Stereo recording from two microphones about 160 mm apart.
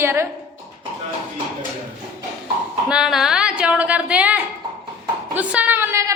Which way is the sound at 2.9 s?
5° right (ahead or behind).